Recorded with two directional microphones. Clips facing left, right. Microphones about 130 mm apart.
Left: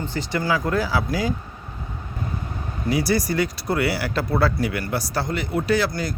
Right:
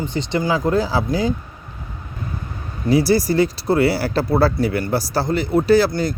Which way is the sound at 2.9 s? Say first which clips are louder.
Right 6 dB; 30° right (ahead or behind).